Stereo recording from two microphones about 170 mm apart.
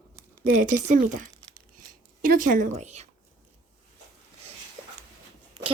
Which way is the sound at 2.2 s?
55° right (ahead or behind).